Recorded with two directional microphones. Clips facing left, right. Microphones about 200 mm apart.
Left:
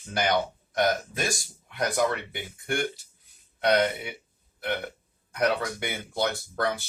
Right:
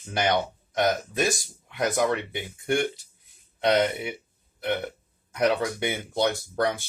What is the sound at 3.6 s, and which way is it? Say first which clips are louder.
Speech: right 1 dB; 20° right (ahead or behind).